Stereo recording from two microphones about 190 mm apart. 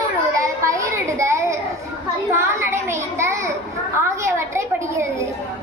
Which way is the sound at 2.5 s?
15° right (ahead or behind).